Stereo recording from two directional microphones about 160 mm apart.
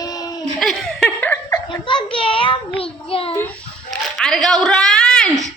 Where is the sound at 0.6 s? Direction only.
Centre (ahead or behind).